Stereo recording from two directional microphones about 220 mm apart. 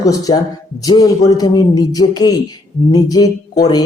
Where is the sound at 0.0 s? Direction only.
15° left (ahead or behind).